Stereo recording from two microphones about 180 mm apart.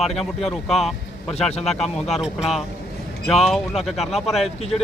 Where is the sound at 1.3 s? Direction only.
35° left (ahead or behind).